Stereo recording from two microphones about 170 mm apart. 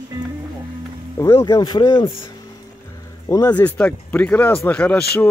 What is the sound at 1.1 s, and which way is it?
Speech, 20° left (ahead or behind).